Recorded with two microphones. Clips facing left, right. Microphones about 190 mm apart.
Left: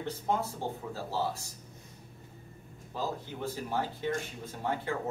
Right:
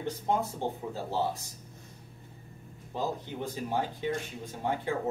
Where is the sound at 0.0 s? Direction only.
20° right (ahead or behind).